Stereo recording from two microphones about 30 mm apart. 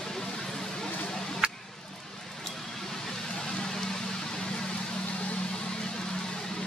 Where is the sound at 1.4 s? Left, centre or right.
Right.